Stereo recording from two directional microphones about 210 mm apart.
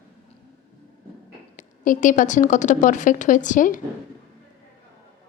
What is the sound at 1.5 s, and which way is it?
A woman's voice, 40° left (ahead or behind).